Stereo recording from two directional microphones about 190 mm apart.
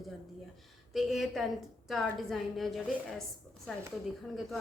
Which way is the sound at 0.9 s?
Centre (ahead or behind).